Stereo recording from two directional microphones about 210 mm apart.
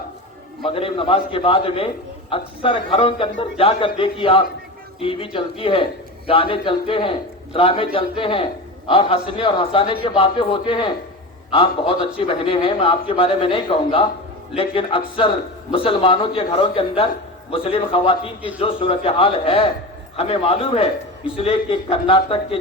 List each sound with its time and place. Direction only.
0.6 s speech: 25° left (ahead or behind)